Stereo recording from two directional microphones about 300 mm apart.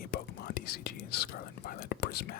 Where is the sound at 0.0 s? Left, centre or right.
Left.